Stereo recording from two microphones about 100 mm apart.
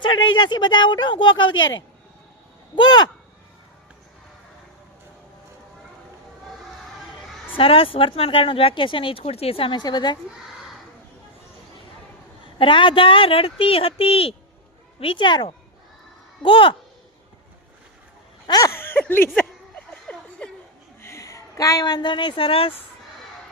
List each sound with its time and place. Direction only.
0.0 s speech: 55° left (ahead or behind)
2.7 s speech: 45° left (ahead or behind)
7.5 s speech: 65° left (ahead or behind)
9.8 s speech: 45° left (ahead or behind)
12.5 s speech: 55° left (ahead or behind)
15.0 s speech: 55° left (ahead or behind)
18.4 s a sound: 40° left (ahead or behind)
18.8 s a sound: 20° left (ahead or behind)
21.0 s a woman's voice: 30° left (ahead or behind); by 22.7 s 65° left (ahead or behind)